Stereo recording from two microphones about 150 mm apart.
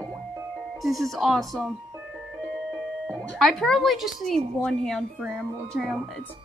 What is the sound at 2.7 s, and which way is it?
Speech, centre (ahead or behind).